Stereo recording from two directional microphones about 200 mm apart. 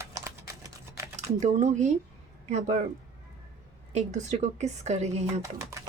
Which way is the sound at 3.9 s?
35° right (ahead or behind).